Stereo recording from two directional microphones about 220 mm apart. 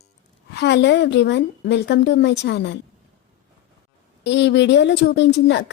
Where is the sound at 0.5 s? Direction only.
50° left (ahead or behind).